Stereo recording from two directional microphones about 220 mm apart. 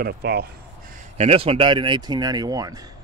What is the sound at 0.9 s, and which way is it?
A man's voice, 30° right (ahead or behind).